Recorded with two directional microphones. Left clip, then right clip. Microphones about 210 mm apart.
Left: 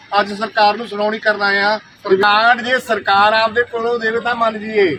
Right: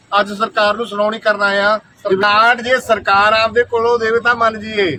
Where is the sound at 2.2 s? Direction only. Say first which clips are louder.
Right 2 dB; 30° right (ahead or behind).